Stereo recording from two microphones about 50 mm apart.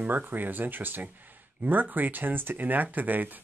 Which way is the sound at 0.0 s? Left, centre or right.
Right.